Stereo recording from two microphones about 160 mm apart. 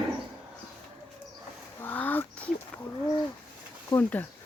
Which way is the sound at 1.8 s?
10° left (ahead or behind).